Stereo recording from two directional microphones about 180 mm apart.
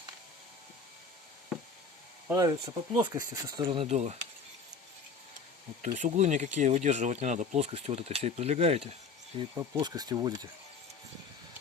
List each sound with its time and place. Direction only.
2.2 s speech: 20° right (ahead or behind)
3.8 s speech: 40° right (ahead or behind)
5.8 s speech: 40° right (ahead or behind)
9.6 s speech: 20° right (ahead or behind)